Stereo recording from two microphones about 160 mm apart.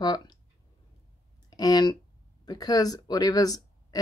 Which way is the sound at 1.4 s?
25° left (ahead or behind).